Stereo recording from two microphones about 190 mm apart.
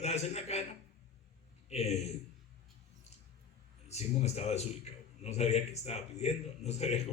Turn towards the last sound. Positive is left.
turn(degrees=35)  # may be behind; listen again after turning